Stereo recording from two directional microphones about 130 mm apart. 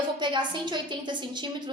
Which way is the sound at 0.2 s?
35° right (ahead or behind).